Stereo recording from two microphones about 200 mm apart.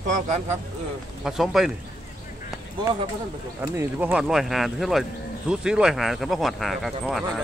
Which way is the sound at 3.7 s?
10° right (ahead or behind).